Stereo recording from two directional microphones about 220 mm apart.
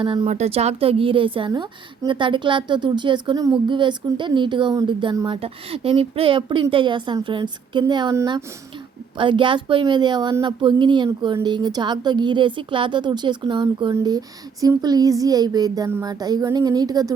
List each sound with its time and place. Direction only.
0.0 s a woman's voice: 25° right (ahead or behind)